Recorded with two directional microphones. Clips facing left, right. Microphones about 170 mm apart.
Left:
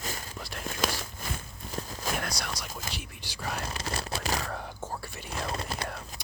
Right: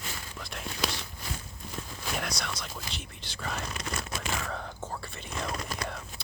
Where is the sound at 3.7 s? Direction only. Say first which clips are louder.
Left 2 dB; 30° left (ahead or behind).